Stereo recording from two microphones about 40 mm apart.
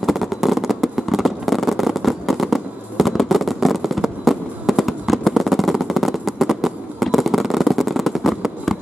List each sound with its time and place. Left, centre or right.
0.0 s fireworks: centre